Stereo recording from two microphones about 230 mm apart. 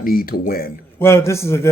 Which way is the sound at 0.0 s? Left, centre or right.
Left.